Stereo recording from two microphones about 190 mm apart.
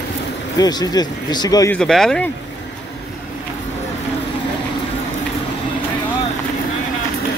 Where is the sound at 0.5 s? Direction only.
20° left (ahead or behind).